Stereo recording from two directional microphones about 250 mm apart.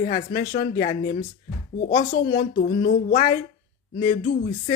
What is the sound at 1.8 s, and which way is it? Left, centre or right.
Speech, left.